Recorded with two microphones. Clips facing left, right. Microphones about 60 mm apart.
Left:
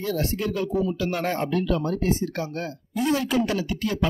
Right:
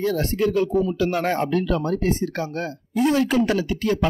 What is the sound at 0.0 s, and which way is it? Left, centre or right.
Speech, right.